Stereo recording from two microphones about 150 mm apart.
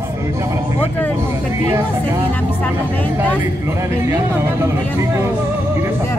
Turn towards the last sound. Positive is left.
turn(degrees=-20)  # may be behind; listen again after turning